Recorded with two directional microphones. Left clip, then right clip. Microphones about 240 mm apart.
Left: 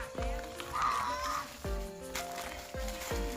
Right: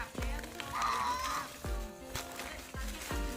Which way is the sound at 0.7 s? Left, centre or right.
Right.